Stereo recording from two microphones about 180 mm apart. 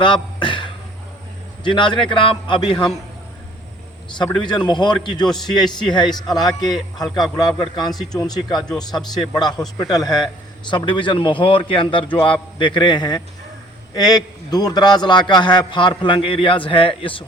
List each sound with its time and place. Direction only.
0.0 s a sound: 25° left (ahead or behind)
1.6 s a man's voice: 25° left (ahead or behind)
4.2 s a man's voice: 25° left (ahead or behind)